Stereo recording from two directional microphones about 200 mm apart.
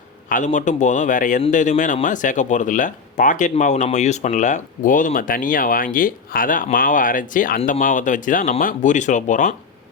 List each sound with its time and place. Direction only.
0.3 s speech: 40° left (ahead or behind)